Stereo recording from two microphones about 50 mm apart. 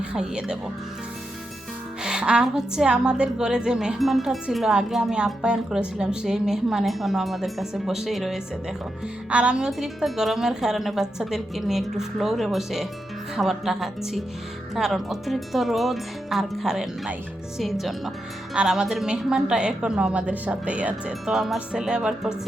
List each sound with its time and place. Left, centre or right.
0.0 s a woman's voice: centre
2.0 s a woman's voice: centre
3.9 s speech: centre
5.1 s a woman's voice: centre
9.3 s a woman's voice: right
9.6 s a woman's voice: centre
18.5 s a woman's voice: centre
21.3 s speech: centre
21.7 s a woman's voice: centre